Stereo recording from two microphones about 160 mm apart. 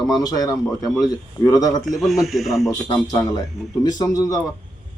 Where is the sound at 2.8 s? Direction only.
20° left (ahead or behind).